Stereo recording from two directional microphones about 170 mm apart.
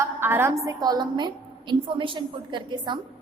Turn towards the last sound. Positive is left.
turn(degrees=-30)  # may be behind; listen again after turning